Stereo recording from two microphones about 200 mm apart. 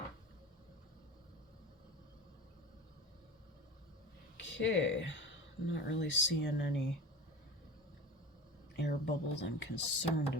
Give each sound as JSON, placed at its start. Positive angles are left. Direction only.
{"t": 4.4, "sound": "speech", "side_deg": 70}
{"t": 8.7, "sound": "speech", "side_deg": 60}